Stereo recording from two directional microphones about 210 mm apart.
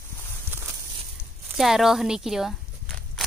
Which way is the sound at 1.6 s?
Centre (ahead or behind).